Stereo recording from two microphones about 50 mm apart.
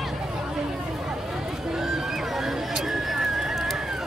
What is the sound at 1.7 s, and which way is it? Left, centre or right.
Neigh, centre.